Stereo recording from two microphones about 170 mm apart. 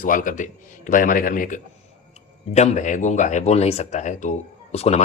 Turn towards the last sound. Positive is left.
turn(degrees=40)  # may be behind; listen again after turning